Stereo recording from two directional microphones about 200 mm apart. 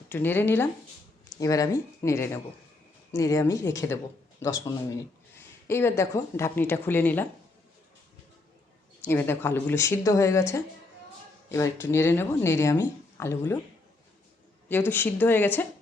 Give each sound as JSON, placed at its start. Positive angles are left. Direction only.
{"t": 0.1, "sound": "speech", "side_deg": 10}
{"t": 5.6, "sound": "speech", "side_deg": 10}
{"t": 9.0, "sound": "speech", "side_deg": 10}
{"t": 14.7, "sound": "speech", "side_deg": 10}